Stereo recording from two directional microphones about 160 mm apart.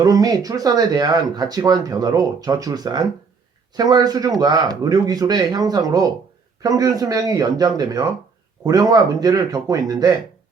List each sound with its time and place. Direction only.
0.0 s speech: 25° right (ahead or behind)